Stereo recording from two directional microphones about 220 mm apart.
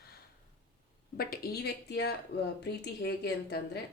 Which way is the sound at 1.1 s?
45° left (ahead or behind).